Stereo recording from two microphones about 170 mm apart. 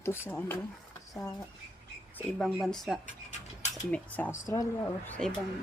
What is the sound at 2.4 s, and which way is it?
Speech, centre (ahead or behind).